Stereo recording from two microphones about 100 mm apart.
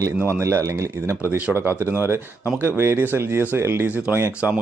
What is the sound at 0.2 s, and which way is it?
Speech, 25° right (ahead or behind).